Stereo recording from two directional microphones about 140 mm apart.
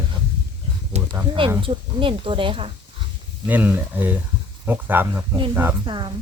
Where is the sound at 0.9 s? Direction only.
50° right (ahead or behind).